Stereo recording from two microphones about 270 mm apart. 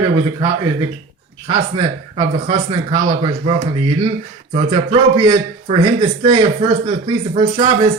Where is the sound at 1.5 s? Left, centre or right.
Centre.